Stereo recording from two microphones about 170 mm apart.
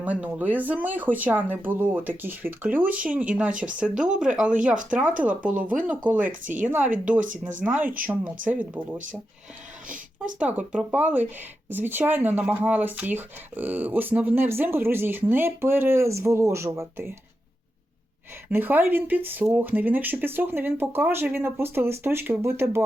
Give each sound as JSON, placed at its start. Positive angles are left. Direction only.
{"t": 0.0, "sound": "speech", "side_deg": -10}
{"t": 6.2, "sound": "speech", "side_deg": -50}
{"t": 7.6, "sound": "speech", "side_deg": -10}
{"t": 10.4, "sound": "speech", "side_deg": -5}
{"t": 18.5, "sound": "speech", "side_deg": -10}